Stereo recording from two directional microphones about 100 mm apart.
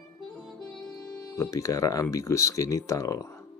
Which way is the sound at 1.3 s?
35° left (ahead or behind).